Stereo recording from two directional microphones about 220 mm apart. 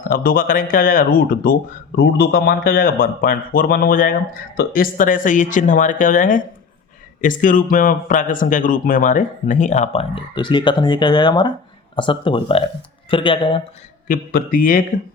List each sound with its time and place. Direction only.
0.1 s a man's voice: 40° left (ahead or behind); by 13.6 s 25° left (ahead or behind)
14.1 s a man's voice: 40° left (ahead or behind)